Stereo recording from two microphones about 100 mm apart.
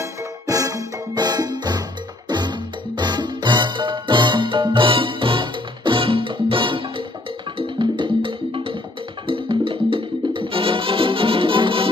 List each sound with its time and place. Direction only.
0.0 s music: 35° right (ahead or behind); by 11.9 s 60° right (ahead or behind)